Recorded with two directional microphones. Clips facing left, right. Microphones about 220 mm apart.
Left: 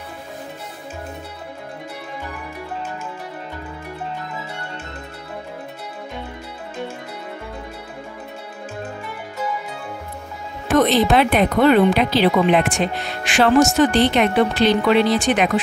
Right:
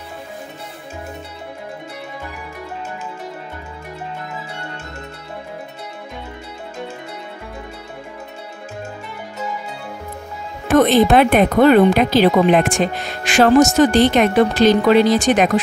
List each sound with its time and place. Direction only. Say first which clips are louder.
10.8 s speech: right 3 dB; 50° right (ahead or behind)